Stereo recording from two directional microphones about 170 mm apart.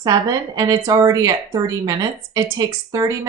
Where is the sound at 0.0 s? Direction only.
20° right (ahead or behind).